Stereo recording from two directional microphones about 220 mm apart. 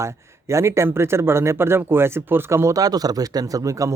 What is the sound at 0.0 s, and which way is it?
Speech, 10° right (ahead or behind).